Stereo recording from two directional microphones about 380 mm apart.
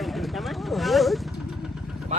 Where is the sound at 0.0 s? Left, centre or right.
Centre.